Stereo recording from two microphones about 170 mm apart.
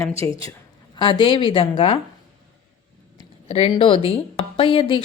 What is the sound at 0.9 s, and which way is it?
A woman's voice, 30° left (ahead or behind).